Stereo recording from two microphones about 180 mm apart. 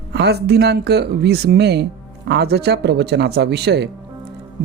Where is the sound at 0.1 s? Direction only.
65° right (ahead or behind).